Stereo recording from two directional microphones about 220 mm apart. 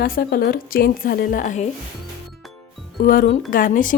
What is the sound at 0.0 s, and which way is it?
Speech, 45° left (ahead or behind).